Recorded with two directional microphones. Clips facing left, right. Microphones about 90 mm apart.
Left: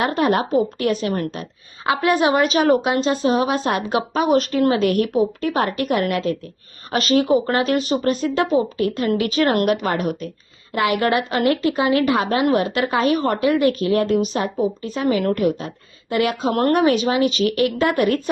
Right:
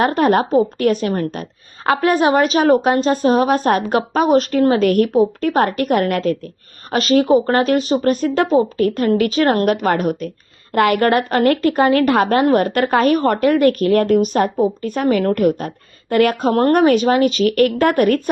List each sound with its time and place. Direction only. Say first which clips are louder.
0.2 s a woman's voice: right 2 dB; 40° right (ahead or behind)